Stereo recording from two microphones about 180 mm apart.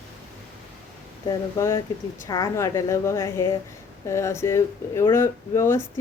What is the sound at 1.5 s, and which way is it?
Speech, 15° left (ahead or behind).